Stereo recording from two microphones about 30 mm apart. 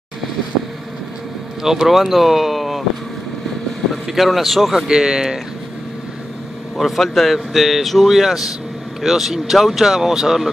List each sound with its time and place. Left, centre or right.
1.6 s speech: centre
4.1 s speech: centre
4.8 s speech: centre
6.8 s speech: centre
9.0 s speech: centre